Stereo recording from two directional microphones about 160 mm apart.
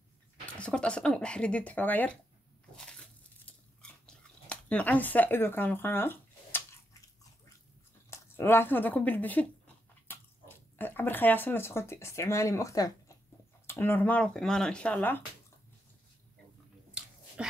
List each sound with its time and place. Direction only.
0.6 s speech: 5° left (ahead or behind)
2.7 s biting: 5° left (ahead or behind)
8.1 s speech: 15° left (ahead or behind)
17.0 s bathtub: 5° right (ahead or behind)
17.4 s dog: 5° right (ahead or behind)